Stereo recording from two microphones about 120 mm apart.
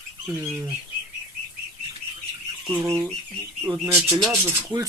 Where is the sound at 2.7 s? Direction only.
20° right (ahead or behind).